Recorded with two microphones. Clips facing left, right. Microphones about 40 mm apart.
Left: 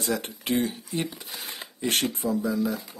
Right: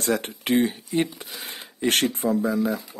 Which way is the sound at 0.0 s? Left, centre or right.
Right.